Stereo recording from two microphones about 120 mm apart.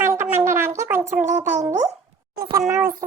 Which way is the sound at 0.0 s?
20° right (ahead or behind).